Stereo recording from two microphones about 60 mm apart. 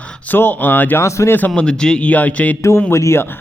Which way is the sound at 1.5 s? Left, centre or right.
Centre.